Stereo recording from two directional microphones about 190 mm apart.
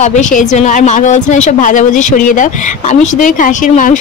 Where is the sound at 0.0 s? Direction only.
40° left (ahead or behind).